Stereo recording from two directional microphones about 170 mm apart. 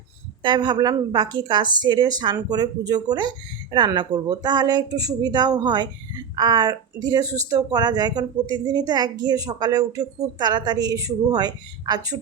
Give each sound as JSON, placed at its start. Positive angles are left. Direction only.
{"t": 0.4, "sound": "speech", "side_deg": -25}